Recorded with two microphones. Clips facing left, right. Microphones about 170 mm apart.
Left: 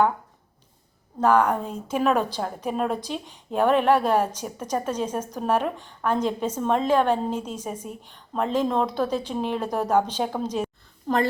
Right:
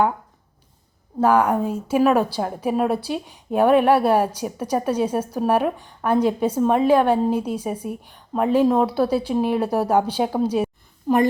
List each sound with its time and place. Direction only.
1.2 s a woman's voice: 10° right (ahead or behind)